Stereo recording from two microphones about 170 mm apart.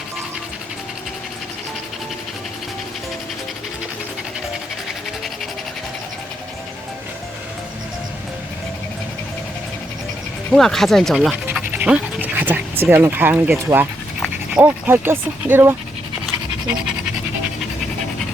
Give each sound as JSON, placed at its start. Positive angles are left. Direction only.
{"t": 10.5, "sound": "speech", "side_deg": 0}
{"t": 13.7, "sound": "speech", "side_deg": -25}
{"t": 14.5, "sound": "speech", "side_deg": -10}